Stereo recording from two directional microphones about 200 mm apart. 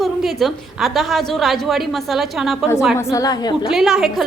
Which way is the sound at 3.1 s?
20° left (ahead or behind).